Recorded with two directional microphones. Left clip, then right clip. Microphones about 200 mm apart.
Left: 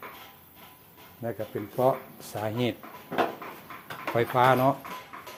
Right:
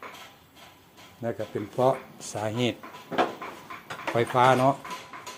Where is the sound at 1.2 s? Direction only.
5° right (ahead or behind).